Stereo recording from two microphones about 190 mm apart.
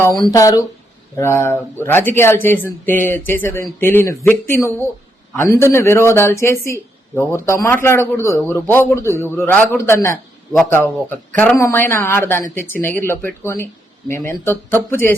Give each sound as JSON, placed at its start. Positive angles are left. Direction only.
{"t": 0.0, "sound": "a man's voice", "side_deg": 20}
{"t": 10.5, "sound": "a man's voice", "side_deg": 5}